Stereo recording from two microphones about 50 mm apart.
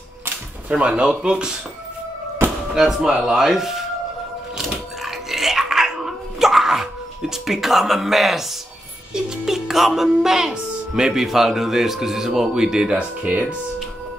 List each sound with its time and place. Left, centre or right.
0.7 s speech: right
2.7 s speech: centre
4.6 s a sound: centre
9.1 s speech: centre
13.2 s speech: right